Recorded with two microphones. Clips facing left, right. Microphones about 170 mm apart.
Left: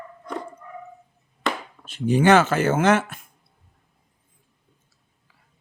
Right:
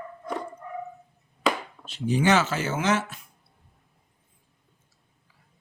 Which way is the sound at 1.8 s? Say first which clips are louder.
Left 5 dB; 55° left (ahead or behind).